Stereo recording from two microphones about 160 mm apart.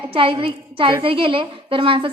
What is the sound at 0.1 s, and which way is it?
A woman's voice, 35° right (ahead or behind).